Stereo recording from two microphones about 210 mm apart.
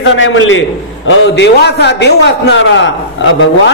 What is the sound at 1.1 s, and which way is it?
A man's voice, 55° left (ahead or behind).